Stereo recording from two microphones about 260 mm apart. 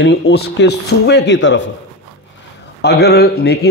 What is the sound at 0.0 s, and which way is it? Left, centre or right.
A man's voice, left.